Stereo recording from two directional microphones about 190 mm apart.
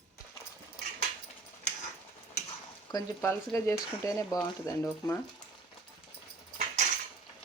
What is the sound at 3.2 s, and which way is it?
Speech, 15° left (ahead or behind).